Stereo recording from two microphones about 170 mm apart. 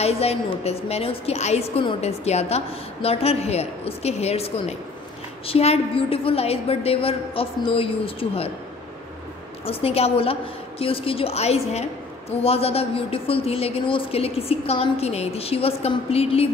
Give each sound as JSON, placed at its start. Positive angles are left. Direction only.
{"t": 0.0, "sound": "a woman's voice", "side_deg": 35}
{"t": 9.7, "sound": "a woman's voice", "side_deg": 35}